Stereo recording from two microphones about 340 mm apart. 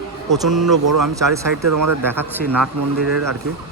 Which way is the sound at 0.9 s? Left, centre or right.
Right.